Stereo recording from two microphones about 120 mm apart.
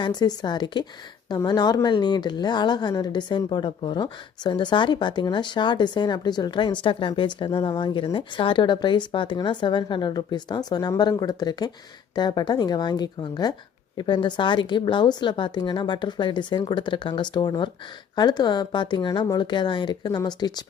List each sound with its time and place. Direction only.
0.0 s speech: 35° left (ahead or behind)